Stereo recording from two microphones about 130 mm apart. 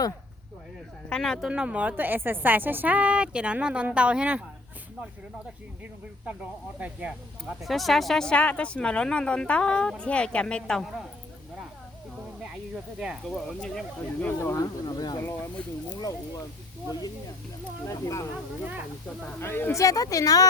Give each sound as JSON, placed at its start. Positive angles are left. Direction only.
{"t": 1.1, "sound": "speech", "side_deg": 5}
{"t": 1.5, "sound": "a woman's voice", "side_deg": -10}
{"t": 6.7, "sound": "a woman's voice", "side_deg": -10}
{"t": 7.6, "sound": "speech", "side_deg": 0}
{"t": 12.4, "sound": "speech", "side_deg": -5}
{"t": 14.5, "sound": "speech", "side_deg": 30}
{"t": 15.2, "sound": "speech", "side_deg": 20}
{"t": 17.8, "sound": "speech", "side_deg": 25}
{"t": 19.4, "sound": "speech", "side_deg": 15}